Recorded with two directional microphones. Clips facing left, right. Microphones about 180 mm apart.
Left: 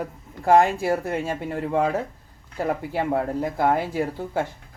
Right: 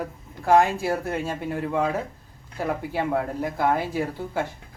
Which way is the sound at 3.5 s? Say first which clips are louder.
Left 1 dB; 15° left (ahead or behind).